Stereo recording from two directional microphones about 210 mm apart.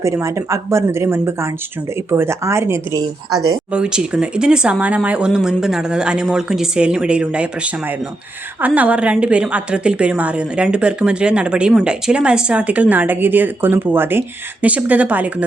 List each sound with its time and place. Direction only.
0.0 s a woman's voice: 15° right (ahead or behind)